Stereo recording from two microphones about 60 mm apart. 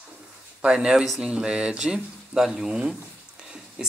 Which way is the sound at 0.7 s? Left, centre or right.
Centre.